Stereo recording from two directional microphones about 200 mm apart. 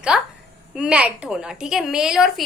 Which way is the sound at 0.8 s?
5° right (ahead or behind).